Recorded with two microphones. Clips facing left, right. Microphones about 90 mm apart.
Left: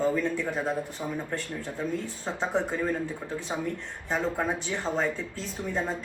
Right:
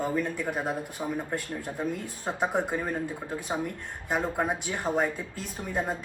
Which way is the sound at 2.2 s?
15° right (ahead or behind).